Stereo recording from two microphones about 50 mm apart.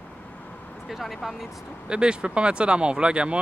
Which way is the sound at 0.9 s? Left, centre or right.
Centre.